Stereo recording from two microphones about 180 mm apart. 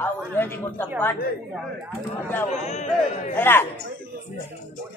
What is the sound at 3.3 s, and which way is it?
Speech, 10° left (ahead or behind).